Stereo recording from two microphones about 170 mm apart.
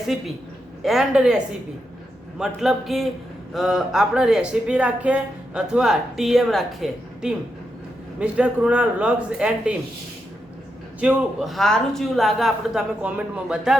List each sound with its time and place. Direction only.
0.1 s speech: centre (ahead or behind)
2.4 s a man's voice: centre (ahead or behind)
11.0 s speech: 5° right (ahead or behind)